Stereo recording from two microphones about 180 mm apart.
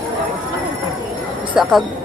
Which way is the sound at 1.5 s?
Centre (ahead or behind).